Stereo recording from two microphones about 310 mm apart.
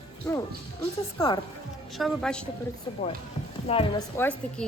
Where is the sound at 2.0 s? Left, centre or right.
Centre.